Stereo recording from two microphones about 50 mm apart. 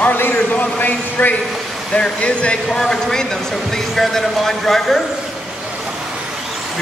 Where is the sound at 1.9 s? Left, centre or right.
Left.